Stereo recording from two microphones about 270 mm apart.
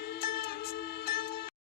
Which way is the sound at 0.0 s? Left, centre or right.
Left.